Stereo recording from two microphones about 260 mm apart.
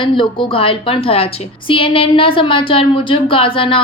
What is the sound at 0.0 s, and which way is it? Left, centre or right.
Speech, centre.